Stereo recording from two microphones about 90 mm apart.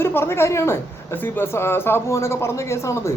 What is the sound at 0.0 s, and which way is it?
Speech, 25° left (ahead or behind).